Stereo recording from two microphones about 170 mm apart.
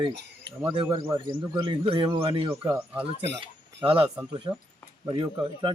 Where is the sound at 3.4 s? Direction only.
30° right (ahead or behind).